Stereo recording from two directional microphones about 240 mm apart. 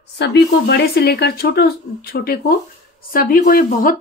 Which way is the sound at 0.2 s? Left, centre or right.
Left.